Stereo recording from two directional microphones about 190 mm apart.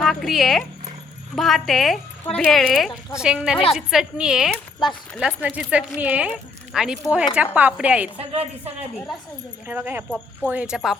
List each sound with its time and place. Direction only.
0.0 s a woman's voice: centre (ahead or behind)
8.2 s a woman's voice: 30° right (ahead or behind)
9.6 s a woman's voice: 10° right (ahead or behind)